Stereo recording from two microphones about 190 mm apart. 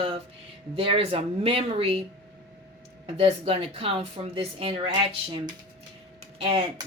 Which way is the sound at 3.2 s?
30° right (ahead or behind).